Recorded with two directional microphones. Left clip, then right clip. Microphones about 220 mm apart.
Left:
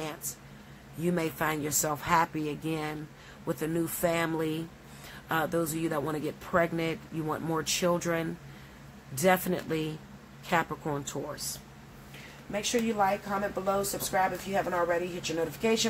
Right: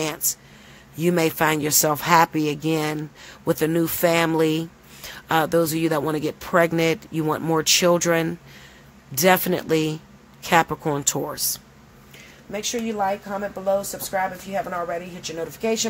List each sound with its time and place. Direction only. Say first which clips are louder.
1.0 s speech: right 10 dB; 40° right (ahead or behind)